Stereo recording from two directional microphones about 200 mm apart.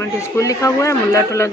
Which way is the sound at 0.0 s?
15° left (ahead or behind).